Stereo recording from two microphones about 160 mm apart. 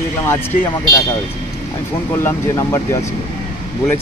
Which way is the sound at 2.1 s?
20° left (ahead or behind).